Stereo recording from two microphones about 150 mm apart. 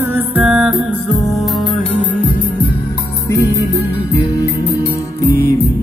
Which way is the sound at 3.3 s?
20° left (ahead or behind).